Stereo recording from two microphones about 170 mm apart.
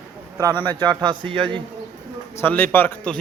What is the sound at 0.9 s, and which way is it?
Speech, 25° right (ahead or behind).